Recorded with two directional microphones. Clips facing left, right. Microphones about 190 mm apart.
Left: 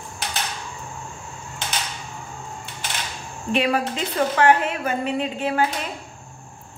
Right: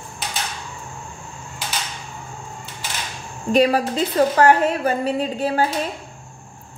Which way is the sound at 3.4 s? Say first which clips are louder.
Right 5 dB; 40° right (ahead or behind).